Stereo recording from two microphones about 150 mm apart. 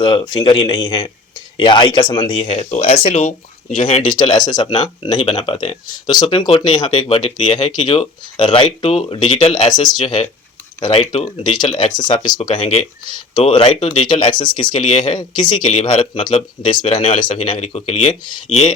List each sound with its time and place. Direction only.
0.0 s speech: 30° left (ahead or behind)
4.2 s speech: 30° left (ahead or behind)
14.8 s speech: 45° left (ahead or behind)
15.1 s speech: 30° left (ahead or behind)
17.6 s speech: 45° left (ahead or behind)